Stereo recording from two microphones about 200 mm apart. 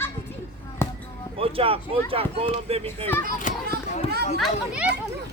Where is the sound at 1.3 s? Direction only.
30° right (ahead or behind).